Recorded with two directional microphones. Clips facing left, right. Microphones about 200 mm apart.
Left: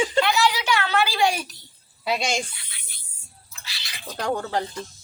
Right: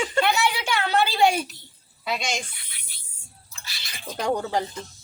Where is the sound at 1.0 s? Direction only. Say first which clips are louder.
Right 2 dB; 25° right (ahead or behind).